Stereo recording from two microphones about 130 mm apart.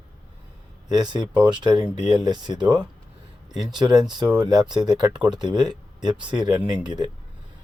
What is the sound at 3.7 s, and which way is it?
Speech, 35° right (ahead or behind).